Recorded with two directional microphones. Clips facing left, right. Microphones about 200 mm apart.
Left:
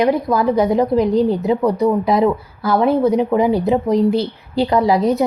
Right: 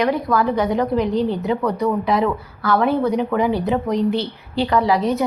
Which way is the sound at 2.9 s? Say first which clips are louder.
Left 4 dB; 35° left (ahead or behind).